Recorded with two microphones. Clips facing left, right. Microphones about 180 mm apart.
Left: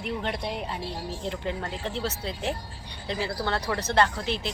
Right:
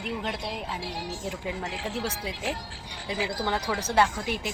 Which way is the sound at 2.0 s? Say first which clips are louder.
Left 1 dB; 10° right (ahead or behind).